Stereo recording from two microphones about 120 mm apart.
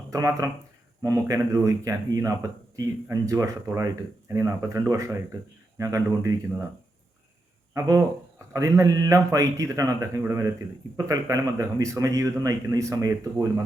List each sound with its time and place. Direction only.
0.1 s speech: 30° right (ahead or behind)
7.7 s speech: 25° right (ahead or behind)